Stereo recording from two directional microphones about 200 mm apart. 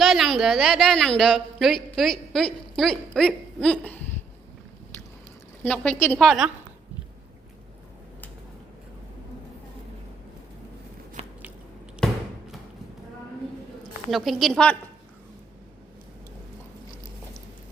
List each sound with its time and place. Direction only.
0.0 s a woman's voice: centre (ahead or behind)
5.6 s a woman's voice: 5° left (ahead or behind)
11.2 s biting: 30° right (ahead or behind)
12.0 s a sound: 5° left (ahead or behind)
14.1 s a woman's voice: centre (ahead or behind)